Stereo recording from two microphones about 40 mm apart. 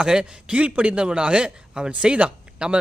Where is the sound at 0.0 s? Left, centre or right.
Right.